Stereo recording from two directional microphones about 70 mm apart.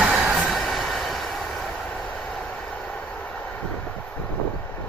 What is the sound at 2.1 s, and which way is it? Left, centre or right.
Vehicle, centre.